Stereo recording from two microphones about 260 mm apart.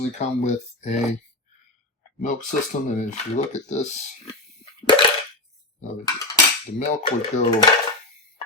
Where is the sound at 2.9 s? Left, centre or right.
Left.